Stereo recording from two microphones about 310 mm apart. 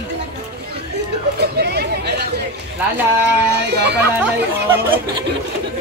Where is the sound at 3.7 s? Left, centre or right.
Right.